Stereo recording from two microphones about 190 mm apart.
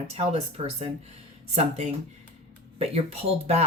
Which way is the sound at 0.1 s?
35° right (ahead or behind).